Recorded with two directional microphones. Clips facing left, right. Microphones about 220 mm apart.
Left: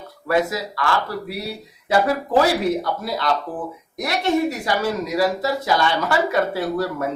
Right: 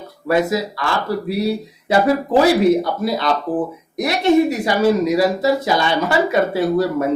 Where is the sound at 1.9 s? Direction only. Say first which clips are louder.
Right 3 dB; 25° right (ahead or behind).